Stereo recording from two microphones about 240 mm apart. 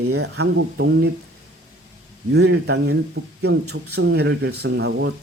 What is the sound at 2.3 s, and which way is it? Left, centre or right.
Speech, right.